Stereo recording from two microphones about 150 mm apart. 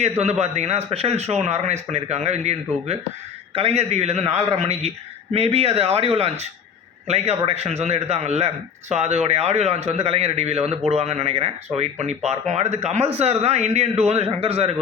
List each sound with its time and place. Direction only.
0.2 s a man's voice: 50° right (ahead or behind)